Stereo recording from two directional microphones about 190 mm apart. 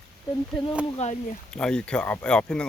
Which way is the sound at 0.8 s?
35° left (ahead or behind).